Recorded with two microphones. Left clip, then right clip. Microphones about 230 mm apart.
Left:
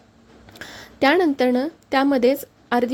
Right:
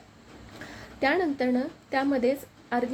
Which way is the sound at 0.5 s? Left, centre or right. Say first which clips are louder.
Left 8 dB; left.